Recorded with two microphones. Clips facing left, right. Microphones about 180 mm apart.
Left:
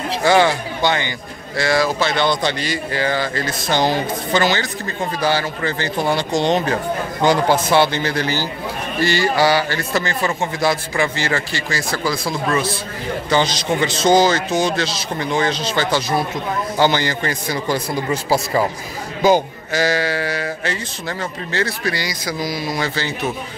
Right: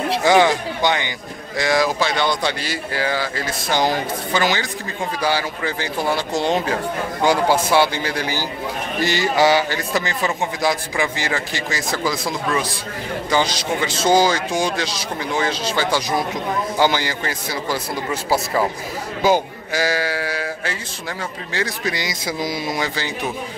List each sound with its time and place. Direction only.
0.2 s a man's voice: 15° right (ahead or behind)